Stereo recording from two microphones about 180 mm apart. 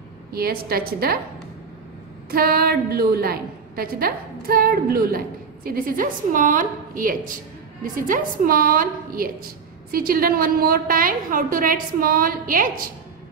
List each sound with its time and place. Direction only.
0.3 s a woman's voice: 55° right (ahead or behind)
2.3 s a woman's voice: 55° right (ahead or behind)